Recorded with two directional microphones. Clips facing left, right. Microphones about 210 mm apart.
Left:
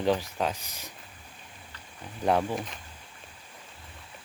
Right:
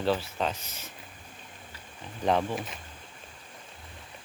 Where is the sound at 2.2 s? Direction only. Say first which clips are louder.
Left 1 dB; 10° left (ahead or behind).